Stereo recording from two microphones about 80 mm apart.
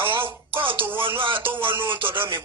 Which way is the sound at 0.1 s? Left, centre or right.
Right.